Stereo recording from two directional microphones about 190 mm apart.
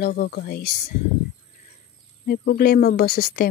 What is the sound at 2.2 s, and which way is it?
Speech, 55° left (ahead or behind).